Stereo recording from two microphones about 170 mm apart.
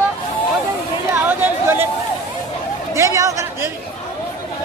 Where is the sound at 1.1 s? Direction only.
10° right (ahead or behind).